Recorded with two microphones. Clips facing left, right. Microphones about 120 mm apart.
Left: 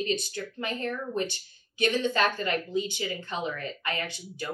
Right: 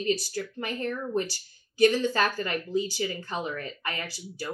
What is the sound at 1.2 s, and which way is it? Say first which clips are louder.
A woman's voice: left 5 dB; 35° right (ahead or behind).